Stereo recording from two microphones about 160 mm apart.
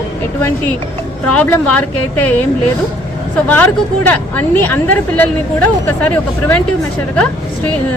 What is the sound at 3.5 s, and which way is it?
Speech, 10° left (ahead or behind).